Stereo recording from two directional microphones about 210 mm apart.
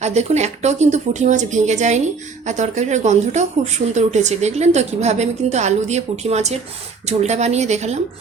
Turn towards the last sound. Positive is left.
turn(degrees=-35)  # may be behind; listen again after turning